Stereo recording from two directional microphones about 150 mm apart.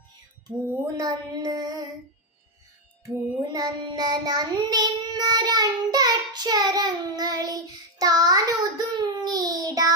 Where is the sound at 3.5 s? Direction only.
25° right (ahead or behind).